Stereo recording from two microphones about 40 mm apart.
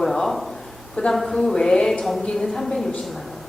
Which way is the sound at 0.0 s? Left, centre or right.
Centre.